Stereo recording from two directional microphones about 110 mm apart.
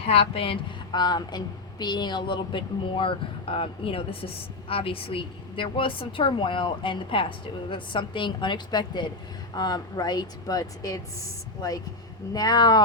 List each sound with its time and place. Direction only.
0.0 s a woman's voice: 65° left (ahead or behind); by 11.0 s 35° left (ahead or behind)
12.3 s a woman's voice: 35° left (ahead or behind)